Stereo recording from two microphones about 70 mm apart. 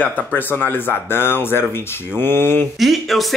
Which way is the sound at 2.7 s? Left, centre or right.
Centre.